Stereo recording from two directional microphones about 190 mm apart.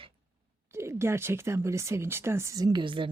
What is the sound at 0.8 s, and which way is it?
Speech, 15° right (ahead or behind).